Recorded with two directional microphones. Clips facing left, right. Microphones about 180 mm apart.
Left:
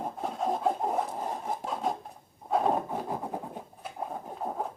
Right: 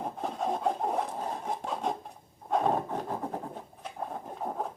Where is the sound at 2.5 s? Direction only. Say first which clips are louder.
Left 1 dB; 5° left (ahead or behind).